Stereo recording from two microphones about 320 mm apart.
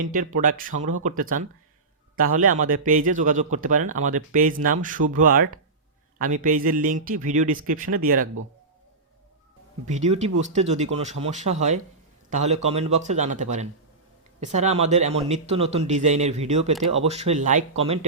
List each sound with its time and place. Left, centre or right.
0.0 s a man's voice: right
9.9 s a man's voice: right